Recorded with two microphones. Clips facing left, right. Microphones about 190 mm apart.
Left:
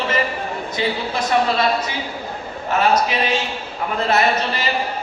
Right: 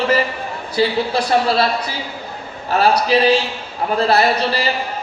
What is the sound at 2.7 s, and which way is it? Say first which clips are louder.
A man's voice: right 3 dB; 35° right (ahead or behind).